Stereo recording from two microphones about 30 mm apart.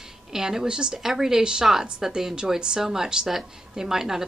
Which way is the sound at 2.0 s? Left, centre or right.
Centre.